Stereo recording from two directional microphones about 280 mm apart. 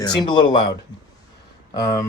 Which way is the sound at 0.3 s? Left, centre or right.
Centre.